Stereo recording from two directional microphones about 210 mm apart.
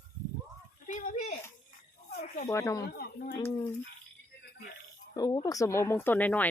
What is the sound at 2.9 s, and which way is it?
Speech, 45° left (ahead or behind).